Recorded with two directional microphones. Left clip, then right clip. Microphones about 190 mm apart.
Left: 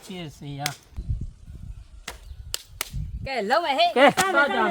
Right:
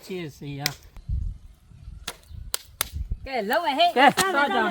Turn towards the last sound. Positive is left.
turn(degrees=20)  # may be behind; listen again after turning